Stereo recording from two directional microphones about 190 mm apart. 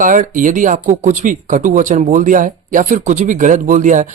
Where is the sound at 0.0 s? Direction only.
45° right (ahead or behind).